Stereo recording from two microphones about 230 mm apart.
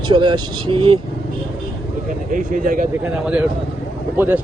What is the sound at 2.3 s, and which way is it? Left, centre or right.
Speech, right.